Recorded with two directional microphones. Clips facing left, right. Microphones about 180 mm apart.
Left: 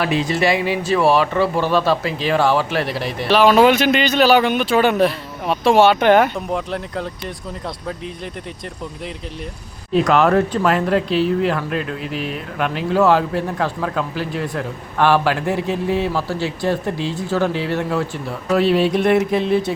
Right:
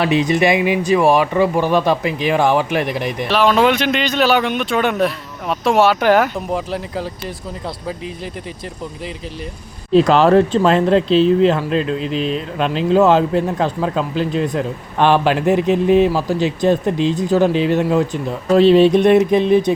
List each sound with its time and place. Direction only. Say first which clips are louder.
0.0 s speech: right 3 dB; 20° right (ahead or behind)
3.2 s speech: left 2 dB; centre (ahead or behind)
9.9 s speech: right 4 dB; 30° right (ahead or behind)